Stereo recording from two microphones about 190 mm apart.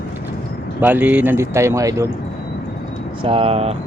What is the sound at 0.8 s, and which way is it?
Speech, 10° right (ahead or behind).